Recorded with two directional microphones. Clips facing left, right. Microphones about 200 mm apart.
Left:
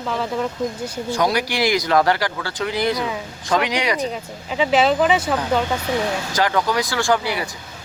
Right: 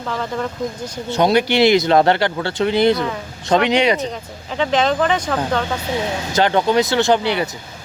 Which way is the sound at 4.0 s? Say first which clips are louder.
Left 1 dB; 5° left (ahead or behind).